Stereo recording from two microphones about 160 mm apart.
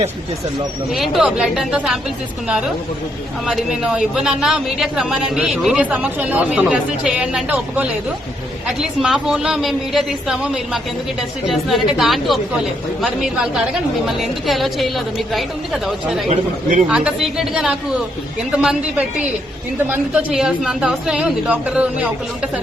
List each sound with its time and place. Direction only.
0.9 s a woman's voice: centre (ahead or behind)
3.4 s a woman's voice: 5° right (ahead or behind)
16.3 s speech: 55° right (ahead or behind)
16.9 s a woman's voice: 5° right (ahead or behind)